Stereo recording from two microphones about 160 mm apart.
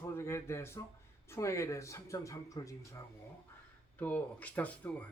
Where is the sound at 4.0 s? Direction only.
10° left (ahead or behind).